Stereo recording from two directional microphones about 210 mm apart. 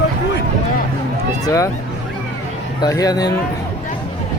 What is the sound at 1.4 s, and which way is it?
Speech, 15° left (ahead or behind).